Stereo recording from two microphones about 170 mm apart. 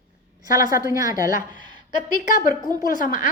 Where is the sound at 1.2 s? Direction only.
50° left (ahead or behind).